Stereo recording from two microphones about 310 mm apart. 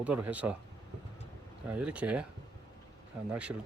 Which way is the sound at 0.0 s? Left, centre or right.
Centre.